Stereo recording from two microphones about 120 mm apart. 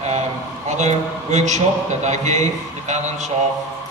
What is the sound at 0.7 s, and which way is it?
A man's voice, 75° right (ahead or behind).